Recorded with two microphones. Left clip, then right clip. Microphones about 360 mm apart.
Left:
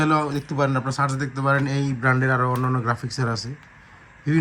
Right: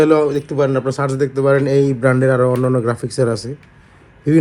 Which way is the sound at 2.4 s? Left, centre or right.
Right.